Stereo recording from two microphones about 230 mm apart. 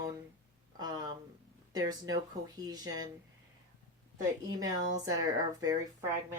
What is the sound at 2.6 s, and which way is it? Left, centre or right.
Speech, centre.